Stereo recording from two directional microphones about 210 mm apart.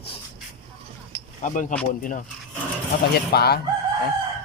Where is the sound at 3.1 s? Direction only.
50° left (ahead or behind).